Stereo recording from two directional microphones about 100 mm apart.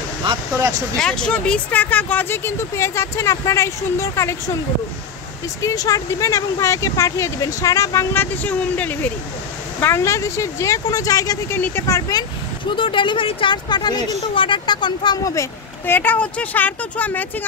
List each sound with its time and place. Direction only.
0.9 s speech: 5° left (ahead or behind); by 4.4 s 30° left (ahead or behind)
5.6 s speech: 35° left (ahead or behind)
11.5 s speech: 25° left (ahead or behind)
12.7 s speech: 55° left (ahead or behind)
15.9 s speech: 20° left (ahead or behind)